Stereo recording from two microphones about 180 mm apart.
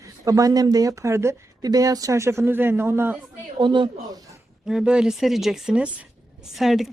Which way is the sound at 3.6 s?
25° right (ahead or behind).